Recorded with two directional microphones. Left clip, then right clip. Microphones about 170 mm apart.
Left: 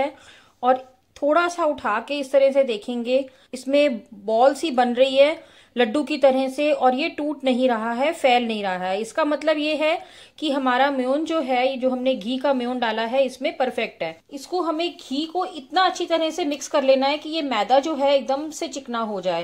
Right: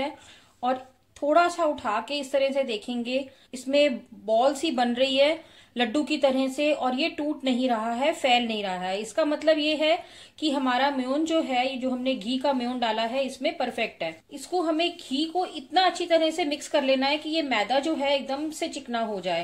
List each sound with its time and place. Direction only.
0.6 s a woman's voice: 20° left (ahead or behind)